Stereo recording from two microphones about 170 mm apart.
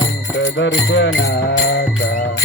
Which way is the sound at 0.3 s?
90° left.